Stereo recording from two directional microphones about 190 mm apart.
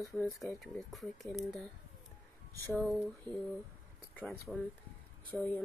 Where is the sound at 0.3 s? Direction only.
15° left (ahead or behind).